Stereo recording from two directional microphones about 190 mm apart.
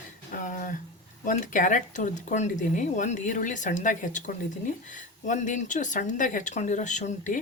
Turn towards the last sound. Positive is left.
turn(degrees=40)  # may be behind; listen again after turning